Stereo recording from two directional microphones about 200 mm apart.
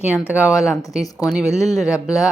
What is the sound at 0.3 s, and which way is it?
Speech, 15° left (ahead or behind).